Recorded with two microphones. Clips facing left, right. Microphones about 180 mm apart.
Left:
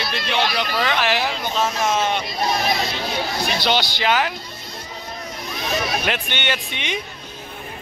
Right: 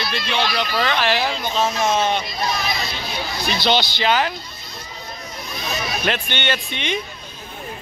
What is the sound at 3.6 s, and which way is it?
Speech, 10° left (ahead or behind).